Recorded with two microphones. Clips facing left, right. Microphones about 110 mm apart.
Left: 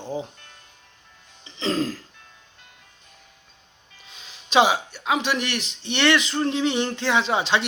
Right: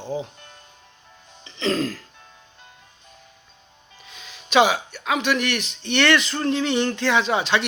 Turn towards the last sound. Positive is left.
turn(degrees=25)  # may be behind; listen again after turning